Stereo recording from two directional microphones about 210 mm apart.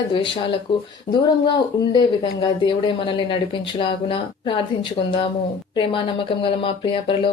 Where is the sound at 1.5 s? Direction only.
20° left (ahead or behind).